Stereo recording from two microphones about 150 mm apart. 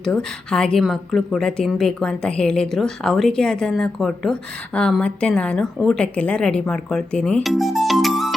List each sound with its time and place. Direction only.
0.0 s a woman's voice: 5° left (ahead or behind)